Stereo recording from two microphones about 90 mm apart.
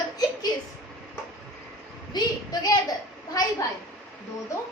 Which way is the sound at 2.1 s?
50° left (ahead or behind).